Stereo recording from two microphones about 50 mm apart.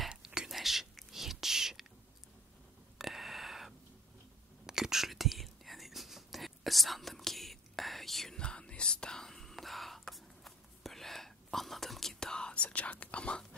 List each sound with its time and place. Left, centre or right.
0.2 s whispering: centre
0.5 s whispering: centre
3.0 s a sound: centre
4.6 s whispering: centre
8.4 s whispering: centre